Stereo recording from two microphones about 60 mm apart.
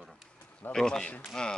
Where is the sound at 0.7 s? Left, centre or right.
Centre.